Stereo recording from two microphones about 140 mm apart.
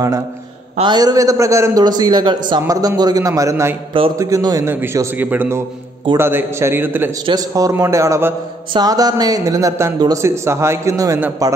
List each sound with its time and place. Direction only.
0.7 s a man's voice: 30° right (ahead or behind)
2.6 s a man's voice: 20° right (ahead or behind)
4.6 s a man's voice: 15° right (ahead or behind)
7.2 s a man's voice: 25° right (ahead or behind)